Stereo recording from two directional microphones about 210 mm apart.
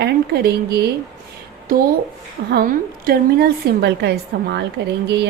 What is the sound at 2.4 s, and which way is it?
A woman's voice, 45° right (ahead or behind).